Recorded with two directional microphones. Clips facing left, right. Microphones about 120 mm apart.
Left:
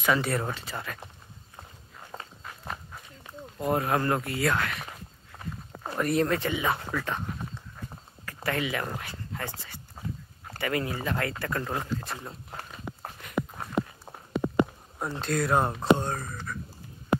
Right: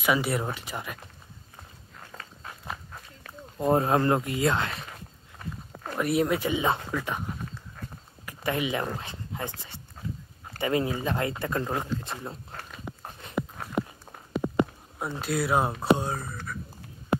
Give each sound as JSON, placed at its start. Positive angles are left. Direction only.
{"t": 0.0, "sound": "speech", "side_deg": -10}
{"t": 2.1, "sound": "walk", "side_deg": 35}
{"t": 3.5, "sound": "speech", "side_deg": -30}
{"t": 5.9, "sound": "speech", "side_deg": -10}
{"t": 8.3, "sound": "speech", "side_deg": -15}
{"t": 9.0, "sound": "dog", "side_deg": -20}
{"t": 10.6, "sound": "speech", "side_deg": -20}
{"t": 13.2, "sound": "dog", "side_deg": -30}
{"t": 15.0, "sound": "speech", "side_deg": -5}